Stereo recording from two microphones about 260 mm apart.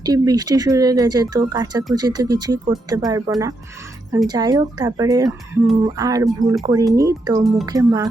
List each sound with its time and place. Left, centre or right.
0.0 s speech: centre